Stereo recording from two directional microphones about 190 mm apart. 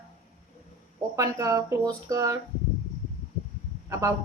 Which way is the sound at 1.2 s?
15° right (ahead or behind).